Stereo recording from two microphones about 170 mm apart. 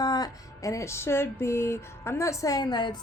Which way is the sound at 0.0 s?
20° left (ahead or behind).